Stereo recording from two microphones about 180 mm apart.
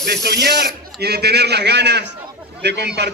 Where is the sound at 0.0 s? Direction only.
65° right (ahead or behind).